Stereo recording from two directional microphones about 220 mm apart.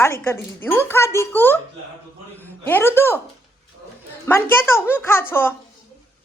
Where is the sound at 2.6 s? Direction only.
10° left (ahead or behind).